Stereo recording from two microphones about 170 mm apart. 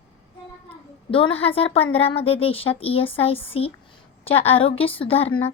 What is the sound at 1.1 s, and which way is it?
A woman's voice, 35° left (ahead or behind).